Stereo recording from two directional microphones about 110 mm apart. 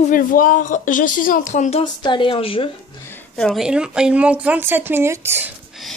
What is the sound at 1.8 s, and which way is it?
Speech, 45° left (ahead or behind).